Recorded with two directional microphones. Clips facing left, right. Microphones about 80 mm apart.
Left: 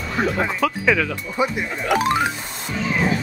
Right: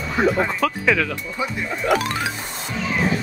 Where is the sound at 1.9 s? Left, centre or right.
Left.